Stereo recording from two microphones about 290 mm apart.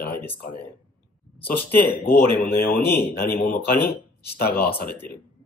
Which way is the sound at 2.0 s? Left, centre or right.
Centre.